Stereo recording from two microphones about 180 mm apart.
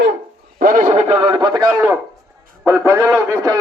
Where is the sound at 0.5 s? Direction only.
50° right (ahead or behind); by 1.6 s 25° right (ahead or behind).